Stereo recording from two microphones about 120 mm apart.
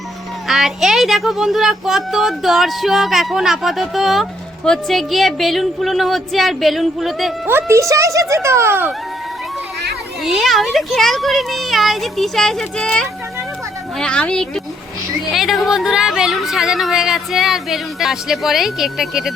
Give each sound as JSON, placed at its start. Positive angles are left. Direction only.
{"t": 0.4, "sound": "speech", "side_deg": -5}
{"t": 7.4, "sound": "speech", "side_deg": -20}
{"t": 10.2, "sound": "speech", "side_deg": 0}